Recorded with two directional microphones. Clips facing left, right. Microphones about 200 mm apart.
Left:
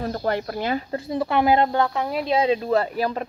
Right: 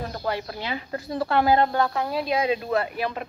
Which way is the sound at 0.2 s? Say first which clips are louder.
Left 4 dB; 45° left (ahead or behind).